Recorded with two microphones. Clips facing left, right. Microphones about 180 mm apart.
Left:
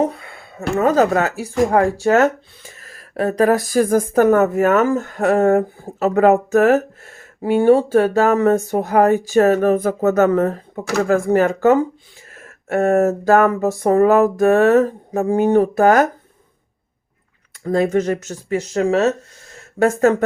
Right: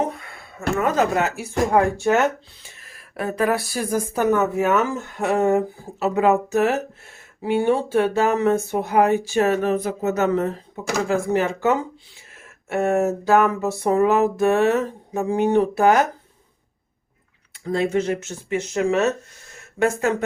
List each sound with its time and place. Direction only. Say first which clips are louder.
0.0 s a sound: left 5 dB; 35° left (ahead or behind)
0.8 s a woman's voice: left 5 dB; 40° left (ahead or behind)
17.6 s a woman's voice: left 4 dB; 45° left (ahead or behind)